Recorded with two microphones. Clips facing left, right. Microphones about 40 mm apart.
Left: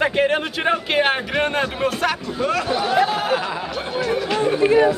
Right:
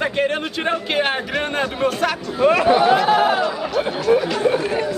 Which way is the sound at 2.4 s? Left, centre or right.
Right.